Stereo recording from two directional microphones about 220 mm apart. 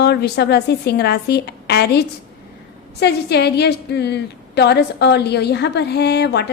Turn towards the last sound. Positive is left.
turn(degrees=50)  # may be behind; listen again after turning